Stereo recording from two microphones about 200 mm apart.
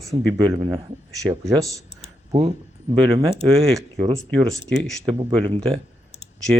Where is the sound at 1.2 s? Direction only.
15° right (ahead or behind).